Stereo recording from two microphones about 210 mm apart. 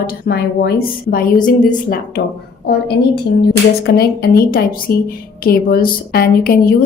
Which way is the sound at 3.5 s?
50° left (ahead or behind).